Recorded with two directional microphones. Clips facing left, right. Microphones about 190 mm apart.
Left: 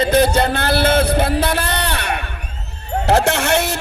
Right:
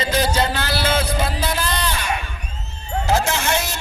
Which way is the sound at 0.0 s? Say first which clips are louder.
Left 6 dB; 55° left (ahead or behind).